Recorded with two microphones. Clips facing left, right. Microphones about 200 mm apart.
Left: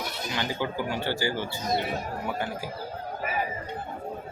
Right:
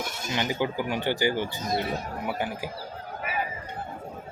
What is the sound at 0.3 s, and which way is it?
Speech, 20° right (ahead or behind).